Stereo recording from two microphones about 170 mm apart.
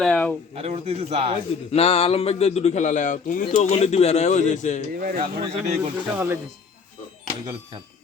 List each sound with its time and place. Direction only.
0.0 s speech: 10° left (ahead or behind)
0.5 s a man's voice: 35° right (ahead or behind)
1.7 s speech: 35° left (ahead or behind)
4.9 s speech: 60° right (ahead or behind)
5.2 s a man's voice: 35° right (ahead or behind)
6.1 s speech: 10° right (ahead or behind)